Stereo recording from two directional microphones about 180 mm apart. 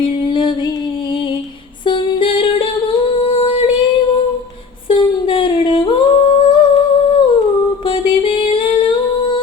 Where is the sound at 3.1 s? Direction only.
30° left (ahead or behind).